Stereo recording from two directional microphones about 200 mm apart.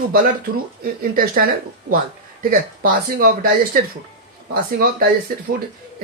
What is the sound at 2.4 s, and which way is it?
Speech, 45° right (ahead or behind).